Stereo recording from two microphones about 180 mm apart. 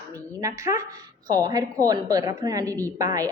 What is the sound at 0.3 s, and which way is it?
A woman's voice, 15° right (ahead or behind).